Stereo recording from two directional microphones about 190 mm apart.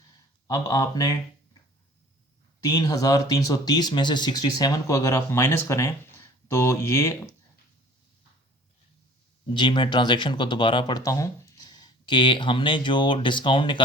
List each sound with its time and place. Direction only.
0.4 s speech: 20° left (ahead or behind)
2.6 s speech: 20° left (ahead or behind)
9.6 s speech: 25° left (ahead or behind)